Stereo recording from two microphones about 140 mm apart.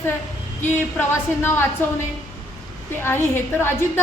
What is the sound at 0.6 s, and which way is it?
A woman's voice, 15° left (ahead or behind).